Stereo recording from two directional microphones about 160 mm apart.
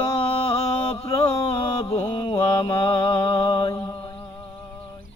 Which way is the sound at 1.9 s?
25° left (ahead or behind).